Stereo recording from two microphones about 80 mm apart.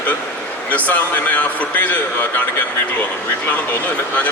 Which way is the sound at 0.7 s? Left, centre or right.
Centre.